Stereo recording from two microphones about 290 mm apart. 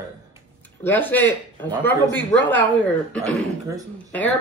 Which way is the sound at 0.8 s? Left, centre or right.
Centre.